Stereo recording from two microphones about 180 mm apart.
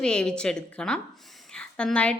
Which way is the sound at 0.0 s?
5° left (ahead or behind).